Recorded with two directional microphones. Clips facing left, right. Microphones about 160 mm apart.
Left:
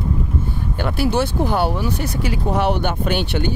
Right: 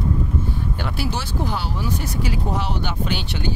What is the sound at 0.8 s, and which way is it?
Speech, 55° left (ahead or behind).